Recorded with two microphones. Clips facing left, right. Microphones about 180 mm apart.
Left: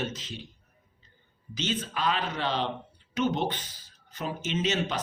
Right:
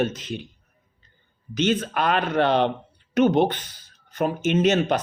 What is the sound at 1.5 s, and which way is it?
Speech, 60° right (ahead or behind).